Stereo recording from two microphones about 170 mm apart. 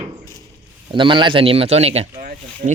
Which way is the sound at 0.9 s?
30° right (ahead or behind).